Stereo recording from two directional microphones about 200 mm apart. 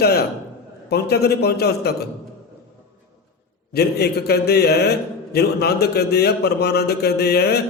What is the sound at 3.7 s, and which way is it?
A man's voice, 55° left (ahead or behind).